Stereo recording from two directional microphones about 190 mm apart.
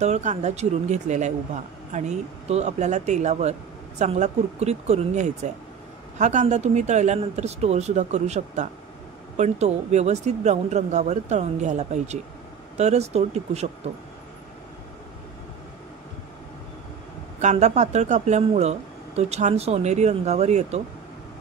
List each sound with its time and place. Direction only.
0.0 s speech: 40° right (ahead or behind)
17.4 s speech: 35° right (ahead or behind)